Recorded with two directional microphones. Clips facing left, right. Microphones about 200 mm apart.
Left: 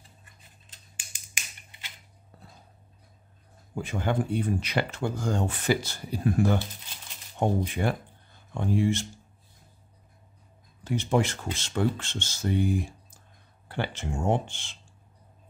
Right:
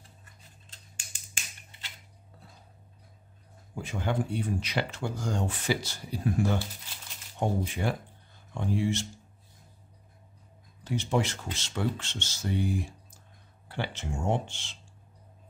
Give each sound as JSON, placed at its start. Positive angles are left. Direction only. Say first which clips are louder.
{"t": 0.7, "sound": "scissors", "louder": "even", "side_deg": 15}
{"t": 1.7, "sound": "a sound", "louder": "left 1 dB", "side_deg": 15}
{"t": 3.7, "sound": "speech", "louder": "left 3 dB", "side_deg": 55}
{"t": 10.8, "sound": "speech", "louder": "left 3 dB", "side_deg": 55}